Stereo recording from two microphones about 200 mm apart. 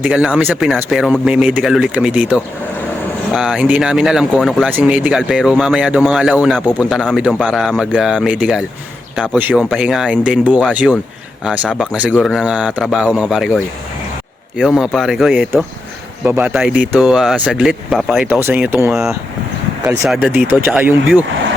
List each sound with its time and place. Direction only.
0.0 s speech: 5° right (ahead or behind)
14.6 s speech: centre (ahead or behind)
19.8 s speech: 15° right (ahead or behind)
20.1 s speech: 5° right (ahead or behind)